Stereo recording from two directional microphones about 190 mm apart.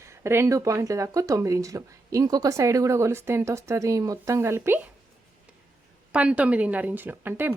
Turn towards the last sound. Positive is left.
turn(degrees=-10)  # may be behind; listen again after turning